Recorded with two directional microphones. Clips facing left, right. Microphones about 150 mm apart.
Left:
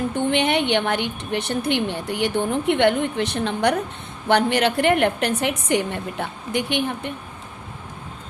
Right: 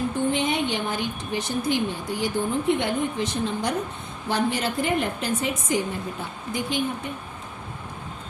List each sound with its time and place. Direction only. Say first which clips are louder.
0.3 s a woman's voice: left 7 dB; 70° left (ahead or behind)